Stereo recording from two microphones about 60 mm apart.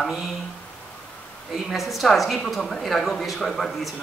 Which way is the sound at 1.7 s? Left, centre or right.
Centre.